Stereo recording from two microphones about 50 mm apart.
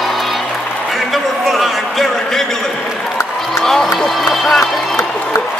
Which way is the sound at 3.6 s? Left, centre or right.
Centre.